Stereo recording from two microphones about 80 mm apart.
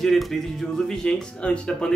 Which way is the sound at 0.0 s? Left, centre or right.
Centre.